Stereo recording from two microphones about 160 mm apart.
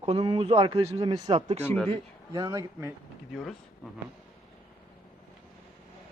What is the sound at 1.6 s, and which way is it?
Speech, 15° left (ahead or behind).